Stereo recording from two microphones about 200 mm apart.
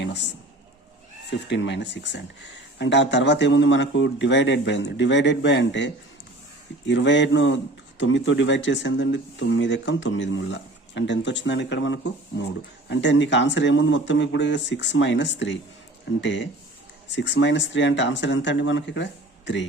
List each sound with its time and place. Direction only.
1.3 s speech: 60° left (ahead or behind)